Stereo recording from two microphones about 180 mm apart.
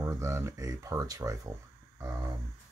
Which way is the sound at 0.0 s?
15° right (ahead or behind).